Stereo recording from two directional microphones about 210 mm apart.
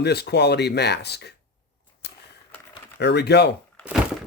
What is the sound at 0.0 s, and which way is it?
Speech, 50° left (ahead or behind).